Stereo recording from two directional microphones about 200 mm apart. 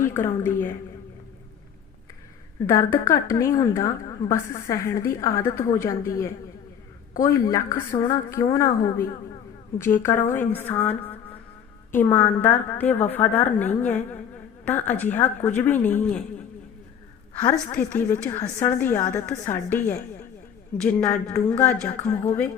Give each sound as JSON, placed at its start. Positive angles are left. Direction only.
{"t": 0.0, "sound": "a woman's voice", "side_deg": 15}
{"t": 2.6, "sound": "a woman's voice", "side_deg": 15}
{"t": 17.4, "sound": "a woman's voice", "side_deg": 10}